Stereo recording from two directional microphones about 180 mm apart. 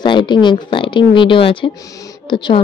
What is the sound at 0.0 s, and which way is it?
A woman's voice, 25° left (ahead or behind).